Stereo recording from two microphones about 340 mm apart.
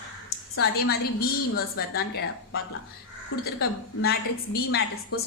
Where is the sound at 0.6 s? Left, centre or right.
Left.